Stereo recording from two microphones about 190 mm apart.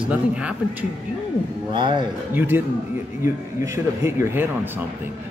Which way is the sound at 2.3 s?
10° right (ahead or behind).